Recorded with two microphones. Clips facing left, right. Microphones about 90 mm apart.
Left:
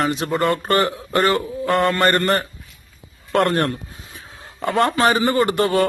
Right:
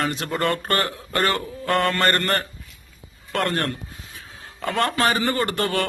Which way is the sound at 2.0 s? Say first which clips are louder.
Left 4 dB; 15° left (ahead or behind).